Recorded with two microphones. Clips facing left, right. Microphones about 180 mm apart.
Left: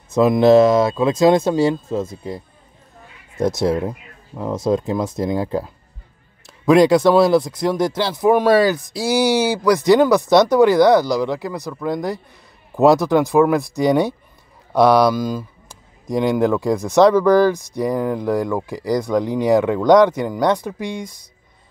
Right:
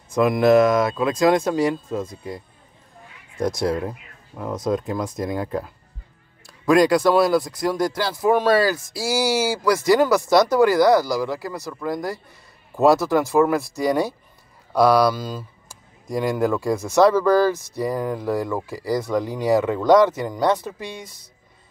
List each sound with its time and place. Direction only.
0.1 s speech: 25° left (ahead or behind)